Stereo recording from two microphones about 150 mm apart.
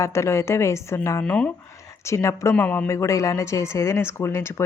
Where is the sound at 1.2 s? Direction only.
5° left (ahead or behind).